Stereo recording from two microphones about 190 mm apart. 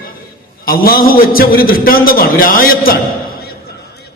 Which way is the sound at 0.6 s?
50° left (ahead or behind).